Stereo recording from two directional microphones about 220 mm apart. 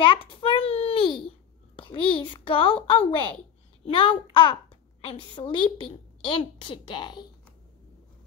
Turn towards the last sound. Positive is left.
turn(degrees=20)  # may be behind; listen again after turning